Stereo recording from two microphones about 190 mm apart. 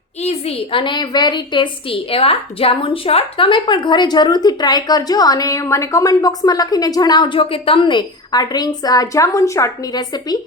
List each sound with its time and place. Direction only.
0.2 s a woman's voice: 35° left (ahead or behind)